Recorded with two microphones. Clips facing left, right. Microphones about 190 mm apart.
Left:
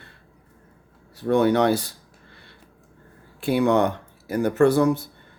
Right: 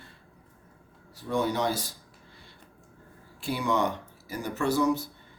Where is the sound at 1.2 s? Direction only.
65° left (ahead or behind).